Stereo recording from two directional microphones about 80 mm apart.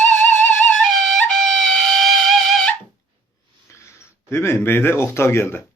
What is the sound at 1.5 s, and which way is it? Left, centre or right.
Music, centre.